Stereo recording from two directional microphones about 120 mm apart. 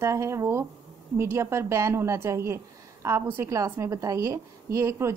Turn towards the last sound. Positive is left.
turn(degrees=-25)  # may be behind; listen again after turning